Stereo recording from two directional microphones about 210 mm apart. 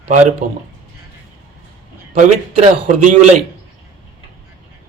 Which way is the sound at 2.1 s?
35° right (ahead or behind).